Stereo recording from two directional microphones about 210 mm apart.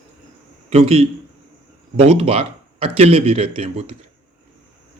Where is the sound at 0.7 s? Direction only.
25° right (ahead or behind).